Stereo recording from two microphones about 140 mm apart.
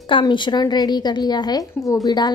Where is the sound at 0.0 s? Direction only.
35° left (ahead or behind).